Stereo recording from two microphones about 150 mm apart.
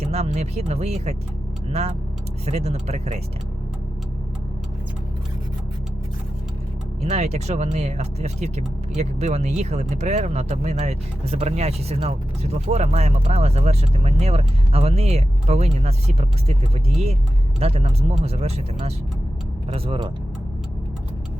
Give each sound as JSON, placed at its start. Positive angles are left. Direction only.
{"t": 0.0, "sound": "speech", "side_deg": -45}
{"t": 7.0, "sound": "speech", "side_deg": -45}